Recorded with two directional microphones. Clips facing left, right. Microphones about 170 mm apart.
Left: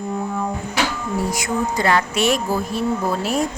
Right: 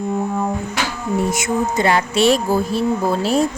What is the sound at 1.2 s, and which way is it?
Speech, 25° right (ahead or behind).